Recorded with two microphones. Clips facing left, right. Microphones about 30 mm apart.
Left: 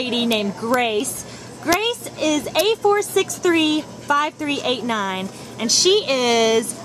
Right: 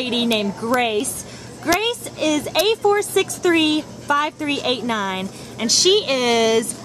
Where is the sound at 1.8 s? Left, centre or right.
Centre.